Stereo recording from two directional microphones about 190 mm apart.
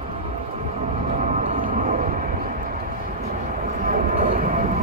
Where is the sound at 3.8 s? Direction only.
40° right (ahead or behind).